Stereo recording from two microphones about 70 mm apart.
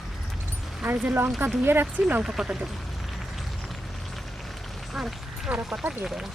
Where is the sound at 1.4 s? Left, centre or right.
Right.